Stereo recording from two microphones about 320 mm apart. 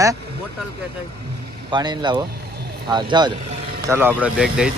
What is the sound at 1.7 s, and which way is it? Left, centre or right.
Speech, centre.